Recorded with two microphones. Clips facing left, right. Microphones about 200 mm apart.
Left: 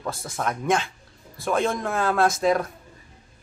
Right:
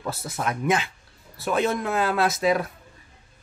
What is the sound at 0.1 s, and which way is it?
A man's voice, 5° right (ahead or behind).